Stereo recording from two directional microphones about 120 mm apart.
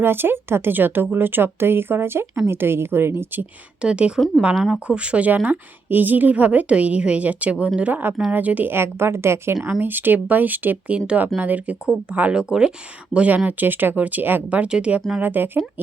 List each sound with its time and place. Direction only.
0.0 s speech: 20° right (ahead or behind)